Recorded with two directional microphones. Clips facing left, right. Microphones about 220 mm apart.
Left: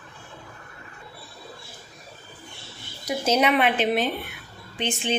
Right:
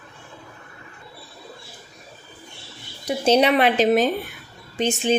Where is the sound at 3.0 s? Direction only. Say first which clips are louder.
Right 4 dB; 30° right (ahead or behind).